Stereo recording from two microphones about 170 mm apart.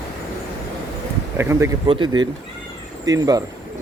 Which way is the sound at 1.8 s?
30° right (ahead or behind).